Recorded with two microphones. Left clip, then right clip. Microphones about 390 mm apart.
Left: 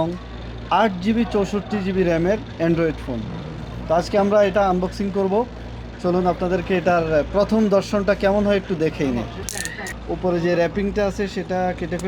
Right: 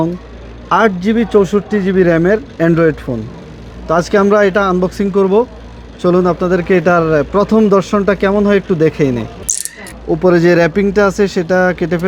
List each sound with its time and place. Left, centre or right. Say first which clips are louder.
0.7 s speech: right 7 dB; right
10.2 s speech: right 10 dB; right